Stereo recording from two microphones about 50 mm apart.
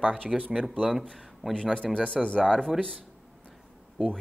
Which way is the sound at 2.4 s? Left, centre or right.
Centre.